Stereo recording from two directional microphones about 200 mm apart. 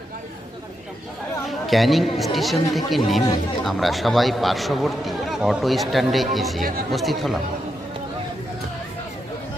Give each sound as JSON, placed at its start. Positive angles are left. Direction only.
{"t": 1.5, "sound": "a man's voice", "side_deg": 0}
{"t": 6.6, "sound": "speech", "side_deg": -45}
{"t": 6.9, "sound": "a man's voice", "side_deg": 0}